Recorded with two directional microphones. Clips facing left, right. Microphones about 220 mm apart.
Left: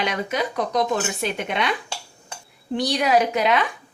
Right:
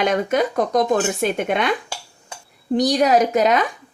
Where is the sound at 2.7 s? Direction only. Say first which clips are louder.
Right 4 dB; 45° right (ahead or behind).